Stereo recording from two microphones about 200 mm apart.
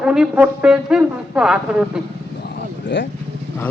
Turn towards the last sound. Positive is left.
turn(degrees=65)  # may be behind; listen again after turning